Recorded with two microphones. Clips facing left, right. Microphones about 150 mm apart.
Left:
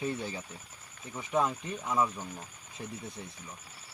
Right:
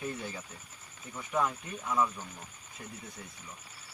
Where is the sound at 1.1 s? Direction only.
20° left (ahead or behind).